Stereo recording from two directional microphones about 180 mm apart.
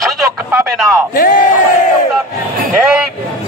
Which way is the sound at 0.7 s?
Centre (ahead or behind).